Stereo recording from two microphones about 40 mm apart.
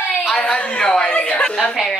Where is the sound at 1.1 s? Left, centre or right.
Left.